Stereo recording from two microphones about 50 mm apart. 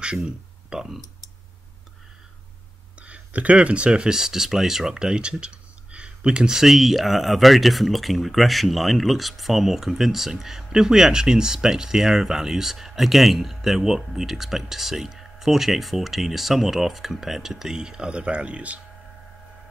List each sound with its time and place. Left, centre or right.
0.0 s speech: centre
3.0 s speech: right